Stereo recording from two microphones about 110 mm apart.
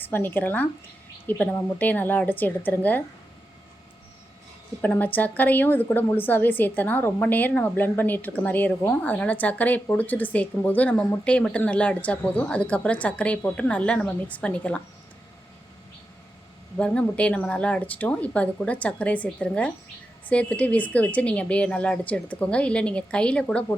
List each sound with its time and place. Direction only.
0.1 s a woman's voice: 20° left (ahead or behind)
4.8 s a woman's voice: 15° left (ahead or behind)
16.7 s a woman's voice: 10° left (ahead or behind)